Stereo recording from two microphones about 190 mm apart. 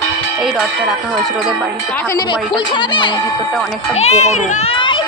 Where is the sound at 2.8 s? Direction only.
25° left (ahead or behind).